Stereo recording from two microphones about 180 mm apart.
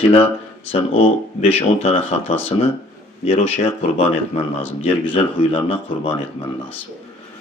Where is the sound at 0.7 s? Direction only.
30° left (ahead or behind).